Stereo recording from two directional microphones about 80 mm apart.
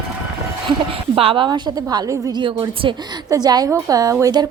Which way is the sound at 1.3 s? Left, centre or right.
Right.